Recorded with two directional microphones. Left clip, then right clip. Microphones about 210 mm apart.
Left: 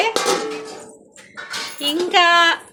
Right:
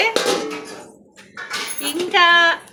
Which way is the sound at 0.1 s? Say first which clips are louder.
Even; 20° left (ahead or behind).